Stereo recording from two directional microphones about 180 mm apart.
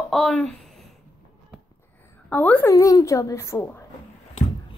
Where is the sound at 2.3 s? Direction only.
10° left (ahead or behind).